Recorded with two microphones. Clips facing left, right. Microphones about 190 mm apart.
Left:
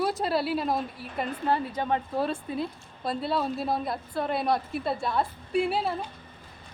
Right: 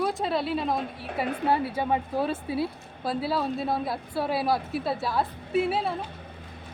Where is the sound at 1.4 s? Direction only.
10° right (ahead or behind).